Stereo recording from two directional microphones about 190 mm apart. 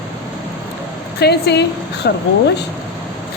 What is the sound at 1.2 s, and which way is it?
A woman's voice, 60° left (ahead or behind).